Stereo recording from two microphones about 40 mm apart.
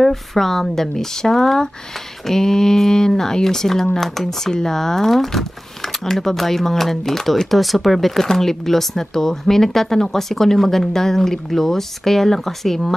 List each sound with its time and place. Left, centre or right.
0.0 s speech: centre